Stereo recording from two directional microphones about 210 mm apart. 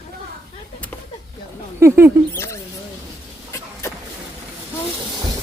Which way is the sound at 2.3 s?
10° left (ahead or behind).